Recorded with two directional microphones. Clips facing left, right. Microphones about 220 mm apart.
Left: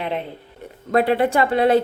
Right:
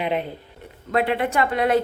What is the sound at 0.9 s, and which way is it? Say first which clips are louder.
Speech: left 4 dB; 40° left (ahead or behind).